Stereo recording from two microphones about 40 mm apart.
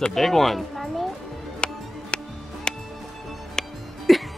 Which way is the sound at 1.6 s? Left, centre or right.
Left.